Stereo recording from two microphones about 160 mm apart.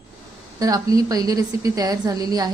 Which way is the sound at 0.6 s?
20° right (ahead or behind).